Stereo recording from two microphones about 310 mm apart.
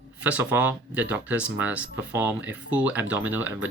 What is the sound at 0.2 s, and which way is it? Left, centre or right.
Speech, centre.